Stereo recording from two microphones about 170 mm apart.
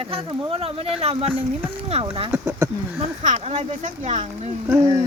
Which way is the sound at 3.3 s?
45° right (ahead or behind).